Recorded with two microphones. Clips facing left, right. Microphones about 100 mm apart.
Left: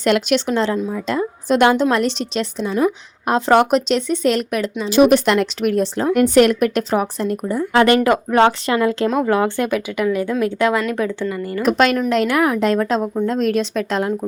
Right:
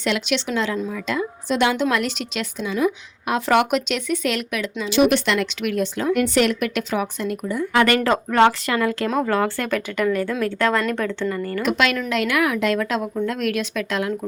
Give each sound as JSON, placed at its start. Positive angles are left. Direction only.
{"t": 0.0, "sound": "a woman's voice", "side_deg": 45}
{"t": 1.7, "sound": "a woman's voice", "side_deg": 35}
{"t": 11.6, "sound": "a woman's voice", "side_deg": 40}